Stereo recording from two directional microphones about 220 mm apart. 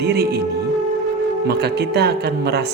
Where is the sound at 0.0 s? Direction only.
45° right (ahead or behind).